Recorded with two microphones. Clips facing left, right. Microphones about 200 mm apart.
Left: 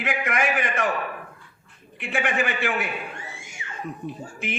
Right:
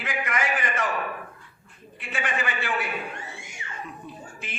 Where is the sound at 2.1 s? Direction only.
65° left (ahead or behind).